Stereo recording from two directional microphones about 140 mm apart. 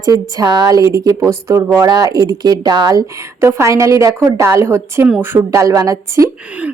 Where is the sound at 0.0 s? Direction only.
25° right (ahead or behind).